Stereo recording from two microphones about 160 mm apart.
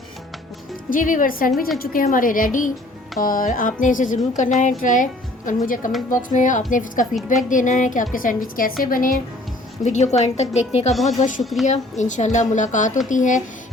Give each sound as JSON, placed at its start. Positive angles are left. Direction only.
{"t": 0.9, "sound": "a woman's voice", "side_deg": 55}
{"t": 9.8, "sound": "a woman's voice", "side_deg": 45}
{"t": 10.9, "sound": "speech", "side_deg": 0}
{"t": 11.6, "sound": "a woman's voice", "side_deg": 45}